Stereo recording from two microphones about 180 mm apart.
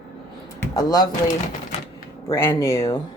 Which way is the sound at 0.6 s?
20° left (ahead or behind).